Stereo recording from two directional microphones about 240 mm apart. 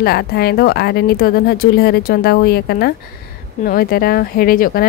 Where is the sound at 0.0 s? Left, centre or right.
Left.